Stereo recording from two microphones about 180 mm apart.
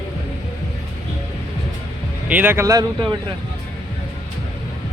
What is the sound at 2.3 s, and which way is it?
Speech, 10° right (ahead or behind).